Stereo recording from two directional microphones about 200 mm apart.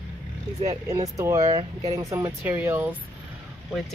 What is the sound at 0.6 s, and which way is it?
Speech, 20° right (ahead or behind).